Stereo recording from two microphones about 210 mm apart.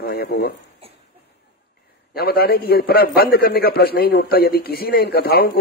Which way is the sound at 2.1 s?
45° left (ahead or behind).